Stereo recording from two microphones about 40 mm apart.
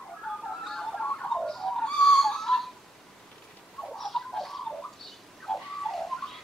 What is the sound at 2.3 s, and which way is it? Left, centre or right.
Whistle, centre.